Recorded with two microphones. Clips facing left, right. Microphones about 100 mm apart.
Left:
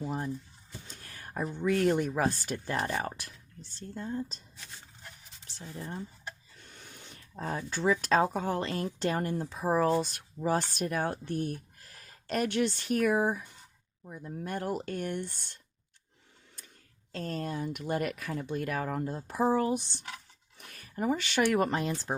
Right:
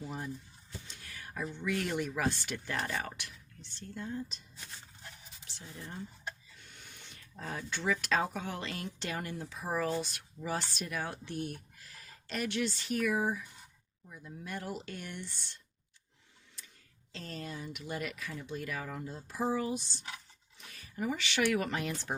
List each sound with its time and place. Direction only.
0.0 s speech: 40° left (ahead or behind)
5.5 s speech: 35° left (ahead or behind); by 15.5 s 50° left (ahead or behind)
17.1 s speech: 45° left (ahead or behind); by 22.1 s 30° left (ahead or behind)